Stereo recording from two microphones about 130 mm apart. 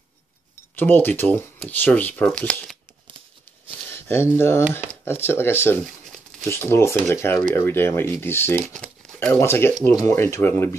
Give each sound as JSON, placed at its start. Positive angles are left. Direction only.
{"t": 0.7, "sound": "speech", "side_deg": 15}
{"t": 3.9, "sound": "a sound", "side_deg": 20}
{"t": 4.4, "sound": "speech", "side_deg": 20}
{"t": 8.7, "sound": "crumpling", "side_deg": 5}
{"t": 9.3, "sound": "speech", "side_deg": 20}